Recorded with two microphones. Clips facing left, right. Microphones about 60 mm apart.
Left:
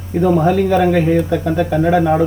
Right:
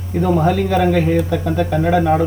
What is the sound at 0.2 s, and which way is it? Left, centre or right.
Speech, centre.